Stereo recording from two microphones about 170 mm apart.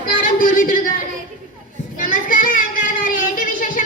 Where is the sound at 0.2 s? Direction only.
55° left (ahead or behind).